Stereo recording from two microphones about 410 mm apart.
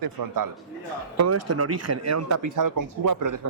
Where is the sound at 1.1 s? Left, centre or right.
Right.